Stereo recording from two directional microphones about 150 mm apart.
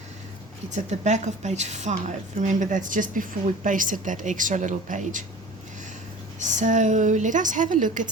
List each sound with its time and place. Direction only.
0.7 s a woman's voice: 50° right (ahead or behind)
6.4 s a woman's voice: 55° right (ahead or behind)